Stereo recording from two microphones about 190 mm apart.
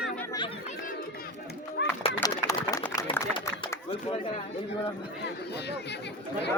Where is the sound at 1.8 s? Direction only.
65° left (ahead or behind).